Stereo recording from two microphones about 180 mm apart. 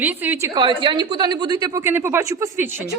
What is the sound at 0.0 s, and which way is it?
Speech, 10° right (ahead or behind).